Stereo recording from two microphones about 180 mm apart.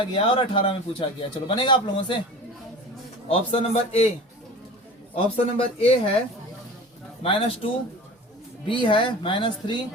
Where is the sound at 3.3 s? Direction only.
35° left (ahead or behind).